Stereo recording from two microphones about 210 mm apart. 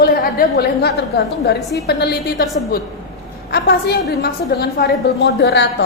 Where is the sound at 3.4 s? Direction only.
50° left (ahead or behind).